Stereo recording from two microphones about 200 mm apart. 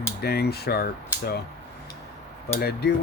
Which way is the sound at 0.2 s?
55° left (ahead or behind).